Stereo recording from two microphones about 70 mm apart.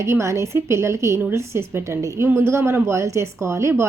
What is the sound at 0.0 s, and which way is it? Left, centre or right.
A woman's voice, right.